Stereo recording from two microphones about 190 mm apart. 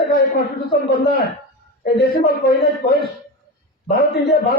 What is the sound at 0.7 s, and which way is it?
Speech, 55° left (ahead or behind).